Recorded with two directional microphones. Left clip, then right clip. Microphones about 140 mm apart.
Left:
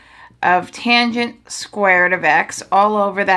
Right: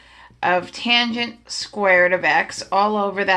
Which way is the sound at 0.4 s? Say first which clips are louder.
Left 4 dB; 45° left (ahead or behind).